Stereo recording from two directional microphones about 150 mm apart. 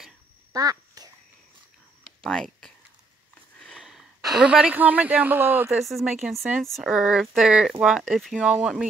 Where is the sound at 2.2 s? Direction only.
5° left (ahead or behind).